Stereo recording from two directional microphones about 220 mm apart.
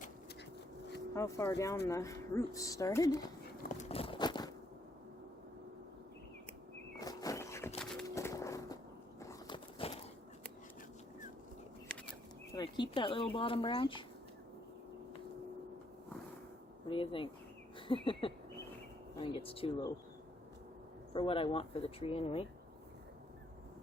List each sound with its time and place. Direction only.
1.1 s speech: 15° left (ahead or behind)
3.6 s biting: 35° left (ahead or behind)
7.0 s a sound: 15° left (ahead or behind)
12.5 s speech: 20° left (ahead or behind)
16.9 s speech: 25° left (ahead or behind)
17.7 s a sound: 25° left (ahead or behind)
19.1 s speech: 25° left (ahead or behind)
21.1 s speech: 25° left (ahead or behind)